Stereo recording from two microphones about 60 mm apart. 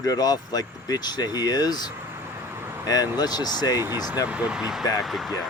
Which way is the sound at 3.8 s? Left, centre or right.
Right.